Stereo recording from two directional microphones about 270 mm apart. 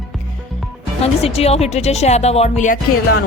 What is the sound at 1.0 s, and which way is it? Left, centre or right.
Speech, left.